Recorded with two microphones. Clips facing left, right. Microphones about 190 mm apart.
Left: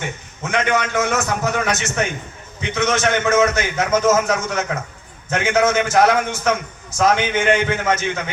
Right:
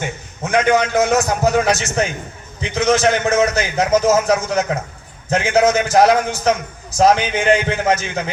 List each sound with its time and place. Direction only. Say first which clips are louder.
0.4 s a man's voice: right 4 dB; 35° right (ahead or behind)